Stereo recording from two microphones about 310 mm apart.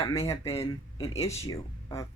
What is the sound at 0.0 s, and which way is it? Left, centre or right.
Speech, centre.